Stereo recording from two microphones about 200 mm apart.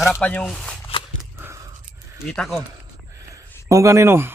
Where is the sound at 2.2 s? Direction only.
Centre (ahead or behind).